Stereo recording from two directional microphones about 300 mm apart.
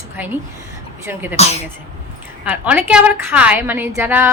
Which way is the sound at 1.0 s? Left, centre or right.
Centre.